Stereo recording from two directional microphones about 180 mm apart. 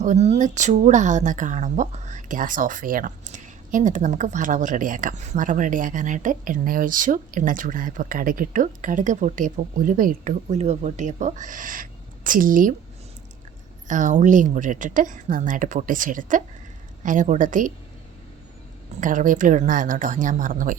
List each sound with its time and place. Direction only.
0.0 s a woman's voice: 40° right (ahead or behind)
13.8 s a woman's voice: 45° right (ahead or behind)
18.9 s a woman's voice: 45° right (ahead or behind)